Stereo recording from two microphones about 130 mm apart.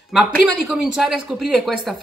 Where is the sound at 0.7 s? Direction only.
5° right (ahead or behind).